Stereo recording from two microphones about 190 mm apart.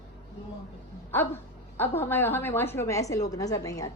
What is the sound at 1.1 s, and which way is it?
A woman's voice, 10° left (ahead or behind).